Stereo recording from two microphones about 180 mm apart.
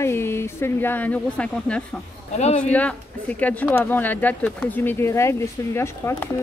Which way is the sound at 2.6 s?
5° left (ahead or behind).